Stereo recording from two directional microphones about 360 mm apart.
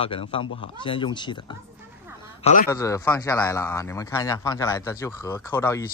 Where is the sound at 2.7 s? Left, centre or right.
Centre.